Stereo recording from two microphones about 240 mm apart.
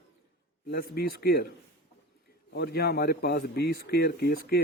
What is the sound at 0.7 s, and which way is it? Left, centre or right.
Speech, left.